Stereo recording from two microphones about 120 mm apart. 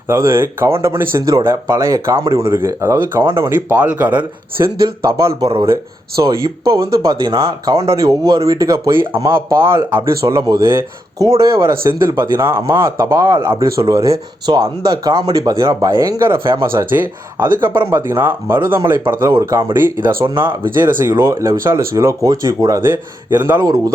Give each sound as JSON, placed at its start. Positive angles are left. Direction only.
{"t": 0.1, "sound": "speech", "side_deg": -20}
{"t": 5.0, "sound": "speech", "side_deg": -25}
{"t": 19.2, "sound": "speech", "side_deg": -30}
{"t": 19.8, "sound": "speech", "side_deg": -20}